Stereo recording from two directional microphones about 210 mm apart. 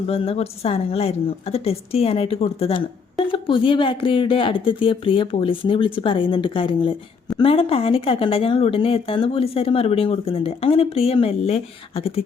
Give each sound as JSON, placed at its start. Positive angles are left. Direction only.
{"t": 0.1, "sound": "a woman's voice", "side_deg": 30}